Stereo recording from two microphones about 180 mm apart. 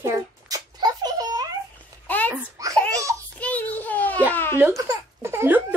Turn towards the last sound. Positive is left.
turn(degrees=-15)  # may be behind; listen again after turning